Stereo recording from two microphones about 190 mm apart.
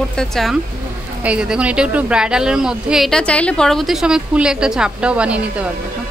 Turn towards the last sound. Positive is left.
turn(degrees=-5)  # may be behind; listen again after turning